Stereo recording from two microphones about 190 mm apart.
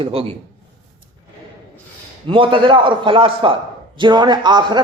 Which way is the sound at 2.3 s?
25° right (ahead or behind).